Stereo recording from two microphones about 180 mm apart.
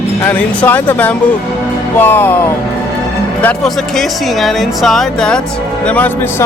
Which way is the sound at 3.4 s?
Centre (ahead or behind).